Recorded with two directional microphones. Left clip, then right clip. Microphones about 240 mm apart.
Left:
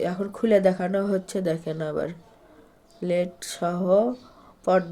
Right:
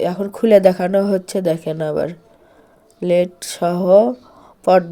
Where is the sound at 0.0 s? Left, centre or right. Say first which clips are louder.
Right 8 dB; right.